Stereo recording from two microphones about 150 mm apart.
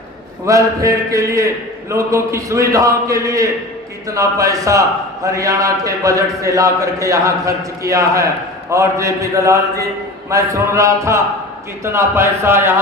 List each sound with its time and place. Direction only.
0.4 s a man's voice: 20° right (ahead or behind)